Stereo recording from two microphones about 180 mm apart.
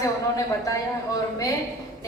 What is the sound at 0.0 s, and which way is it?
Speech, 20° left (ahead or behind).